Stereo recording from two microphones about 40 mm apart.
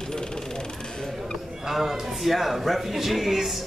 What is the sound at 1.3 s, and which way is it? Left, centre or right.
A man's voice, centre.